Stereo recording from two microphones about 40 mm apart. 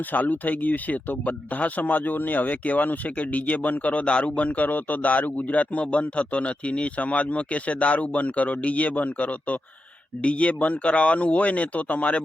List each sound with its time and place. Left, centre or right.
0.1 s speech: left